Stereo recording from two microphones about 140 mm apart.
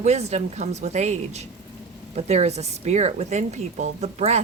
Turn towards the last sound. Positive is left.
turn(degrees=-50)  # may be behind; listen again after turning